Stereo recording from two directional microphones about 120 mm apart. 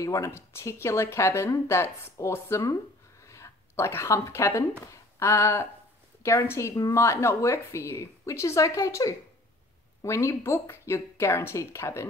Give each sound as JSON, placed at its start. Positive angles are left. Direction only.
{"t": 0.0, "sound": "speech", "side_deg": 25}